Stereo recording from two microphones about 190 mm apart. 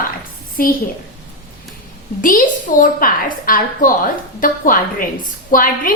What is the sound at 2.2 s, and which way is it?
A woman's voice, 45° left (ahead or behind).